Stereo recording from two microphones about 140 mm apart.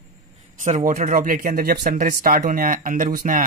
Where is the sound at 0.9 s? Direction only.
65° right (ahead or behind).